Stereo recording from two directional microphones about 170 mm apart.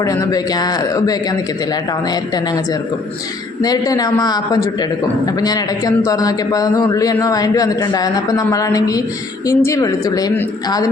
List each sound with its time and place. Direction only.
0.0 s a man's voice: 20° left (ahead or behind)
3.6 s a man's voice: 20° left (ahead or behind)